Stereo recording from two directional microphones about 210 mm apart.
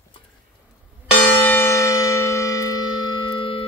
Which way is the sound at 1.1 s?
5° left (ahead or behind).